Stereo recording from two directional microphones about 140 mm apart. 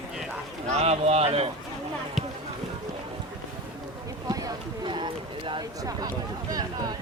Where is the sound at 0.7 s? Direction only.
50° right (ahead or behind).